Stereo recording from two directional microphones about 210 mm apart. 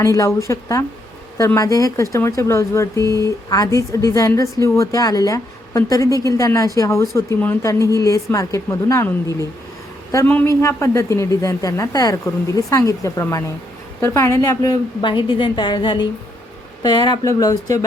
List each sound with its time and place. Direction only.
0.0 s a woman's voice: 15° left (ahead or behind)